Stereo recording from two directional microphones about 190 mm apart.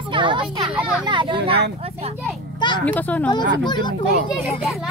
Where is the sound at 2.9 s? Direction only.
10° left (ahead or behind).